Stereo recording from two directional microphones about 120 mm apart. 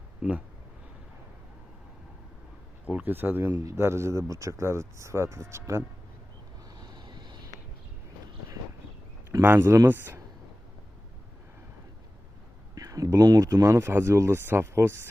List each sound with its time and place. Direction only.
0.2 s speech: 10° right (ahead or behind)
2.8 s speech: 15° right (ahead or behind)
3.5 s speech: 30° right (ahead or behind)
6.7 s vehicle: 40° right (ahead or behind)
9.4 s speech: 20° right (ahead or behind)
12.7 s speech: 30° right (ahead or behind)